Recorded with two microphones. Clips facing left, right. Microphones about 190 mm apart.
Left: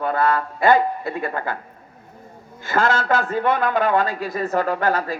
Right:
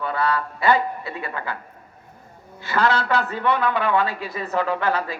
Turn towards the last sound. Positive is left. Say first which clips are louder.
# left 2 dB
turn(degrees=45)  # may be behind; listen again after turning